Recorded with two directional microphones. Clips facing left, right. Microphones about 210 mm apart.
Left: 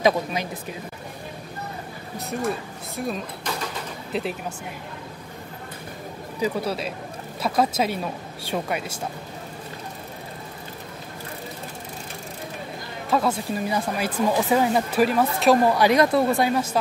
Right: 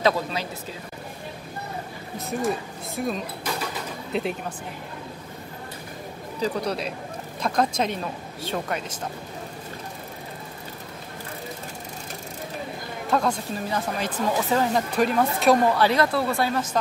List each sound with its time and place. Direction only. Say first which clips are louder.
0.0 s speech: left 2 dB; 15° left (ahead or behind)
3.0 s speech: right 1 dB; centre (ahead or behind)
6.4 s speech: left 1 dB; 5° left (ahead or behind)
13.1 s speech: left 2 dB; 5° left (ahead or behind)
15.7 s speech: left 3 dB; 15° left (ahead or behind)